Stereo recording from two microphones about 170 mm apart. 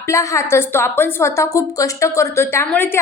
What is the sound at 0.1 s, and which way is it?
A woman's voice, 15° left (ahead or behind).